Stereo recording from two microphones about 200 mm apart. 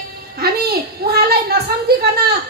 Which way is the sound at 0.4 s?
50° right (ahead or behind).